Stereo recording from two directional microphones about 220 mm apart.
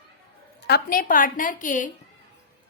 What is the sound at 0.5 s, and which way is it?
A woman's voice, 50° left (ahead or behind).